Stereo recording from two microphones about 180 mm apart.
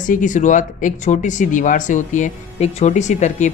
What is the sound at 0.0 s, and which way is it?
Speech, 45° left (ahead or behind).